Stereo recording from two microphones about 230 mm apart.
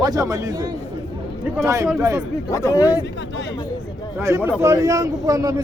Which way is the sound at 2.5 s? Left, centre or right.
Centre.